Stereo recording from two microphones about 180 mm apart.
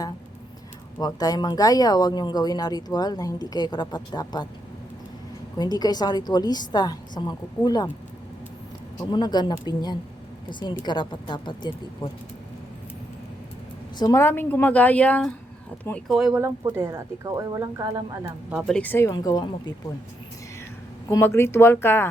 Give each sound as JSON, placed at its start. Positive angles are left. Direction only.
{"t": 0.9, "sound": "speech", "side_deg": 20}
{"t": 5.5, "sound": "speech", "side_deg": 20}
{"t": 9.0, "sound": "speech", "side_deg": 25}
{"t": 14.0, "sound": "a woman's voice", "side_deg": 15}
{"t": 16.4, "sound": "speech", "side_deg": -15}
{"t": 18.7, "sound": "speech", "side_deg": 10}
{"t": 21.1, "sound": "a woman's voice", "side_deg": 15}